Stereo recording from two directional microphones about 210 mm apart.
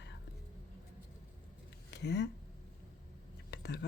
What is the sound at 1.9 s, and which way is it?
Speech, 55° left (ahead or behind).